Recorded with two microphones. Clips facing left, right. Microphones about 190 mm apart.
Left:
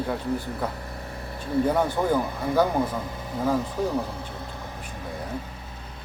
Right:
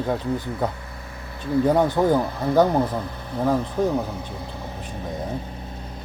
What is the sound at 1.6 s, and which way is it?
Speech, 20° right (ahead or behind).